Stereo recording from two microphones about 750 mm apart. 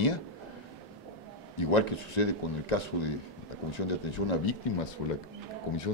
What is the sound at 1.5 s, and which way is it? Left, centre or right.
Speech, left.